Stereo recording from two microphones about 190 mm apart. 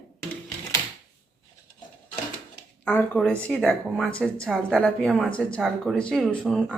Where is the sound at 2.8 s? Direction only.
10° left (ahead or behind).